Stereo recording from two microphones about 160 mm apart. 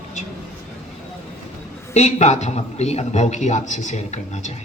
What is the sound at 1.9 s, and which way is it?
A man's voice, 45° left (ahead or behind).